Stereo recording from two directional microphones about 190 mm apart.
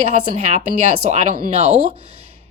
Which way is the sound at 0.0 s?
35° right (ahead or behind).